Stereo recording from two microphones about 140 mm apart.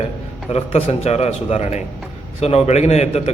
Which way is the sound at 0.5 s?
45° left (ahead or behind).